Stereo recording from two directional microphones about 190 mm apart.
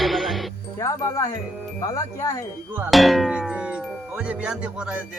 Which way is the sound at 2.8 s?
Centre (ahead or behind).